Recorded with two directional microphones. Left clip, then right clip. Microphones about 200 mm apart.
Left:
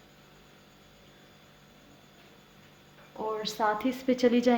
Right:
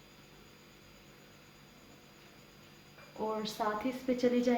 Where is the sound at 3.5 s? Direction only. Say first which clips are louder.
Left 6 dB; 50° left (ahead or behind).